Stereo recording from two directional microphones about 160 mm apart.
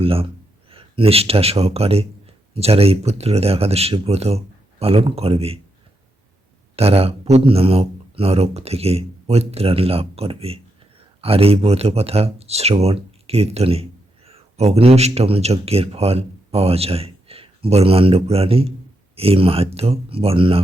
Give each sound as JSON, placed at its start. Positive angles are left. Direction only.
{"t": 0.0, "sound": "speech", "side_deg": -35}
{"t": 6.7, "sound": "speech", "side_deg": -40}